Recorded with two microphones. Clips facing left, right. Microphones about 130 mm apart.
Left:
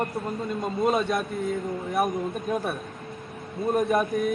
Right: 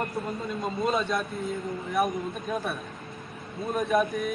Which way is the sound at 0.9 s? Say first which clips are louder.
Left 3 dB; 55° left (ahead or behind).